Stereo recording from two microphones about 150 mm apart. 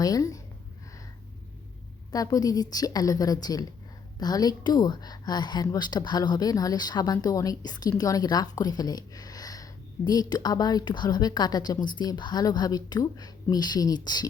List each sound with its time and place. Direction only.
0.0 s a woman's voice: 25° left (ahead or behind)
2.1 s a woman's voice: 25° left (ahead or behind)